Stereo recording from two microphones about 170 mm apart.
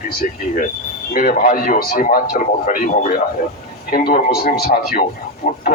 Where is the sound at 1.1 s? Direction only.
55° left (ahead or behind).